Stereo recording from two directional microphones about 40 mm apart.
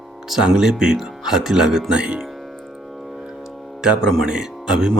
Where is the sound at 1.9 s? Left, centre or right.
Right.